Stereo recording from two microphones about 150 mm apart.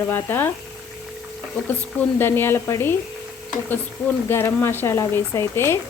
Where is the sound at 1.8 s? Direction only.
10° left (ahead or behind).